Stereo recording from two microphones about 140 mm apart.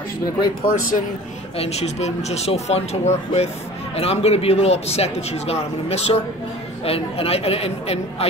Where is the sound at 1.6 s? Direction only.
50° left (ahead or behind).